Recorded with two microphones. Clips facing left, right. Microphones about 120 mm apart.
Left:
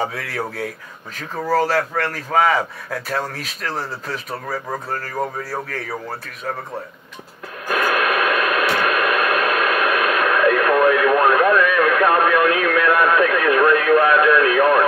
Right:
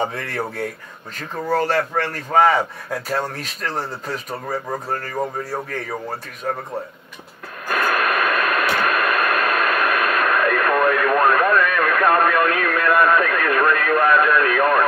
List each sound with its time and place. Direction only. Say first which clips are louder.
0.0 s speech: even; 5° left (ahead or behind)
7.6 s radio: left 1 dB; 5° left (ahead or behind)